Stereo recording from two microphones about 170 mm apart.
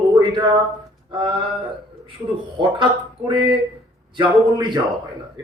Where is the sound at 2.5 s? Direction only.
30° right (ahead or behind).